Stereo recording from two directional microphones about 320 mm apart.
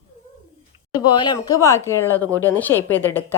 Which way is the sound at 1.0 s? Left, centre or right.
Centre.